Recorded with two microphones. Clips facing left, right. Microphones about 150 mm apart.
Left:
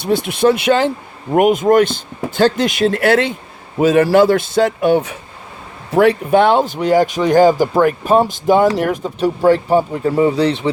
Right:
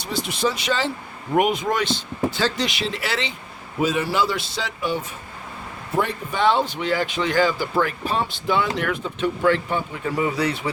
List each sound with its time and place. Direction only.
0.0 s speech: 55° left (ahead or behind)
6.0 s speech: 75° left (ahead or behind); by 10.7 s 30° left (ahead or behind)